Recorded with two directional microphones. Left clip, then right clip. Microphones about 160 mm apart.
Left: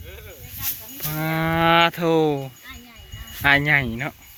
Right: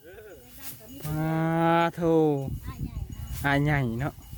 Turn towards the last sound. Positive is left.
turn(degrees=-25)  # may be behind; listen again after turning